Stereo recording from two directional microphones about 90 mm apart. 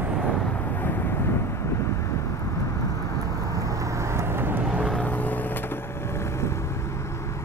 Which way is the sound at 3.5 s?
35° right (ahead or behind).